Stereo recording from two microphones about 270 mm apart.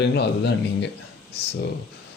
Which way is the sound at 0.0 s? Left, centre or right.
Left.